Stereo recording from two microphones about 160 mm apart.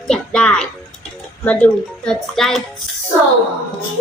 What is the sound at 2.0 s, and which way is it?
Speech, 5° left (ahead or behind).